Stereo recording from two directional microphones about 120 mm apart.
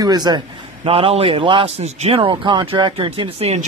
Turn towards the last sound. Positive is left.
turn(degrees=-60)  # may be behind; listen again after turning